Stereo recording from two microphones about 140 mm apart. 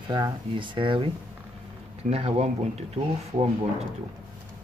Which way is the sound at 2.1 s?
45° right (ahead or behind).